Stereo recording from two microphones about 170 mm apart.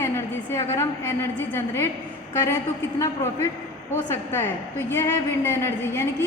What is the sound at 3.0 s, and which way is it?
A woman's voice, 15° left (ahead or behind).